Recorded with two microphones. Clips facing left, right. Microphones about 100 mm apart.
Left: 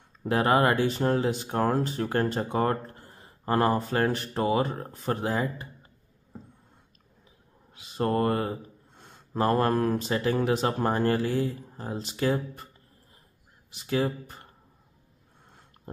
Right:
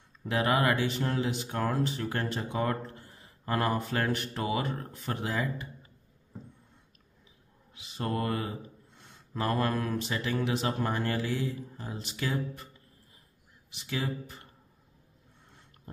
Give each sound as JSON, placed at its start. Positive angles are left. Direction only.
{"t": 0.2, "sound": "speech", "side_deg": 35}
{"t": 7.7, "sound": "speech", "side_deg": 45}
{"t": 13.7, "sound": "speech", "side_deg": 40}